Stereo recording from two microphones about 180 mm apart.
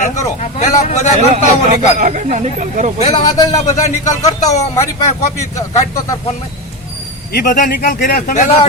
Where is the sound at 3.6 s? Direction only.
40° left (ahead or behind).